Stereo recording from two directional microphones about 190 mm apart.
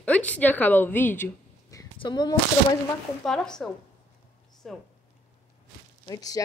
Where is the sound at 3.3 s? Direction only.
5° left (ahead or behind).